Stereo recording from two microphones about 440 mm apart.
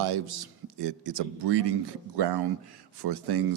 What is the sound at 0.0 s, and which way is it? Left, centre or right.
Speech, right.